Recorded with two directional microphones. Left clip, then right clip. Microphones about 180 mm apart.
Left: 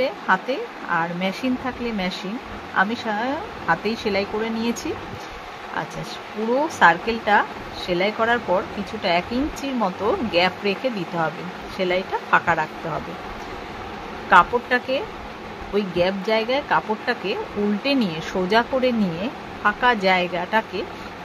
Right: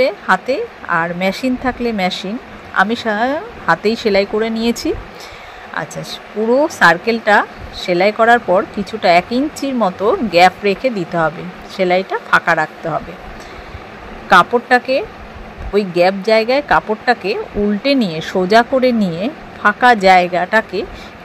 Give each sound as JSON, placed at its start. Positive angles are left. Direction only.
{"t": 0.0, "sound": "speech", "side_deg": -25}
{"t": 6.8, "sound": "speech", "side_deg": -30}
{"t": 14.3, "sound": "speech", "side_deg": -25}